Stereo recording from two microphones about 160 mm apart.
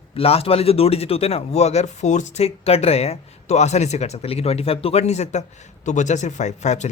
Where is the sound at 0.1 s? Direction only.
40° left (ahead or behind).